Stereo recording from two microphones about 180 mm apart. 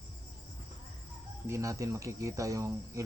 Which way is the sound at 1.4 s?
15° right (ahead or behind).